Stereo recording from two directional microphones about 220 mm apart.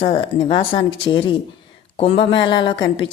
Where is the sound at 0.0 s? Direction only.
20° left (ahead or behind).